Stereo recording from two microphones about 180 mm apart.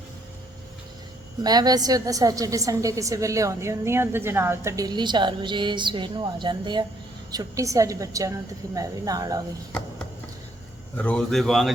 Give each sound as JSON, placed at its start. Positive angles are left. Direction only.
{"t": 1.5, "sound": "a woman's voice", "side_deg": -20}
{"t": 10.9, "sound": "speech", "side_deg": 5}